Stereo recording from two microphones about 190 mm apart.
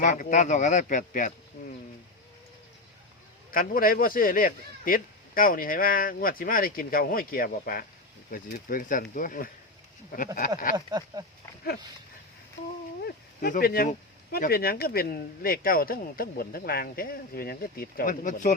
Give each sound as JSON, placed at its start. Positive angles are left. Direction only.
{"t": 0.0, "sound": "speech", "side_deg": 40}
{"t": 3.5, "sound": "speech", "side_deg": 50}
{"t": 10.8, "sound": "speech", "side_deg": -20}
{"t": 13.0, "sound": "speech", "side_deg": 50}